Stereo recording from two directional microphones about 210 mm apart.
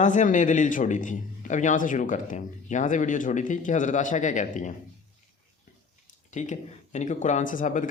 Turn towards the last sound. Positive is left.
turn(degrees=35)  # may be behind; listen again after turning